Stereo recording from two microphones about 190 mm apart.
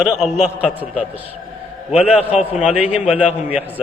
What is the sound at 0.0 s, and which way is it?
Speech, centre (ahead or behind).